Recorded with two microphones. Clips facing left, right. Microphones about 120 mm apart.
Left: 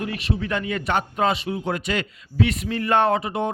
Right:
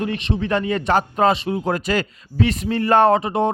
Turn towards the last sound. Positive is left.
turn(degrees=-35)  # may be behind; listen again after turning